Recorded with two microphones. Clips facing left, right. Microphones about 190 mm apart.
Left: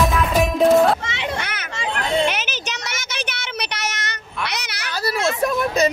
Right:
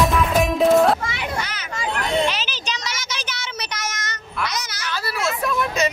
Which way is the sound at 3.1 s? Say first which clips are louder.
Left 2 dB; 60° left (ahead or behind).